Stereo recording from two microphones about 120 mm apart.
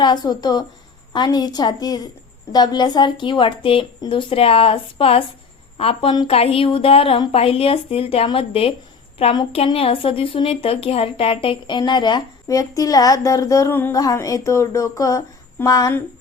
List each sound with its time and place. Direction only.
0.0 s a woman's voice: 35° left (ahead or behind); by 13.9 s 20° left (ahead or behind)
13.9 s speech: 30° left (ahead or behind)